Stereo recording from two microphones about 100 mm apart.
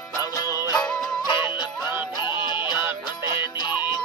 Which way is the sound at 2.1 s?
50° left (ahead or behind).